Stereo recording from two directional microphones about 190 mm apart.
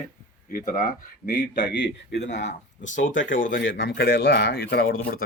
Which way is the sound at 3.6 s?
70° left (ahead or behind).